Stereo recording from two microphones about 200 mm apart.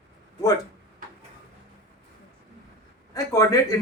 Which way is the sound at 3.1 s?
15° left (ahead or behind).